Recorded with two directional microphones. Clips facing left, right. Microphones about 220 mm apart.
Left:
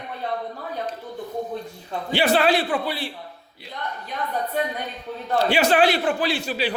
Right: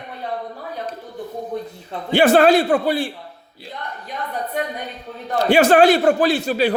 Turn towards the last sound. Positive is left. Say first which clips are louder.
# right 7 dB
turn(degrees=-45)  # may be behind; listen again after turning